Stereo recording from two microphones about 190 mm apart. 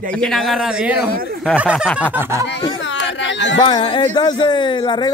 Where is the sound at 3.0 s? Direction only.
70° left (ahead or behind).